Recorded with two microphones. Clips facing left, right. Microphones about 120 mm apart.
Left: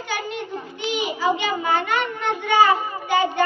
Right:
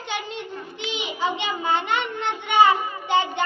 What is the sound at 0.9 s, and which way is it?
A child's voice, 25° right (ahead or behind).